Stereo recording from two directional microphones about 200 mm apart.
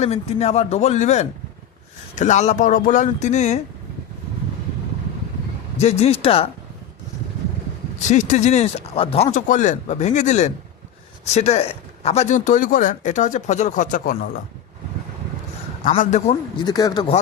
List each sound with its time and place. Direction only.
0.0 s a man's voice: 30° left (ahead or behind)
5.8 s speech: 30° left (ahead or behind)
8.1 s a man's voice: 35° left (ahead or behind)
15.9 s a man's voice: 35° left (ahead or behind)
16.6 s speech: 20° left (ahead or behind)